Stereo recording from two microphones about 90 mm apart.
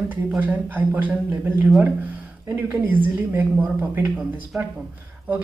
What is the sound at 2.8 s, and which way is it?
Speech, 20° right (ahead or behind).